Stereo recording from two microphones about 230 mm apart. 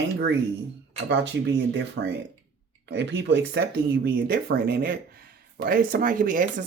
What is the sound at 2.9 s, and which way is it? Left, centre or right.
Speech, right.